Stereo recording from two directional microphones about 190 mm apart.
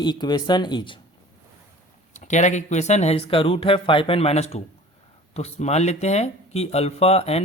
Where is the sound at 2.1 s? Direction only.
40° left (ahead or behind).